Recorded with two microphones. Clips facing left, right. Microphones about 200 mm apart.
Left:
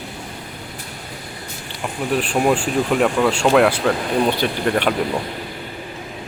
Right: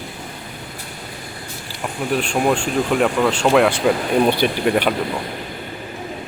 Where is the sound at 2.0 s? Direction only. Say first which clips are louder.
Left 1 dB; centre (ahead or behind).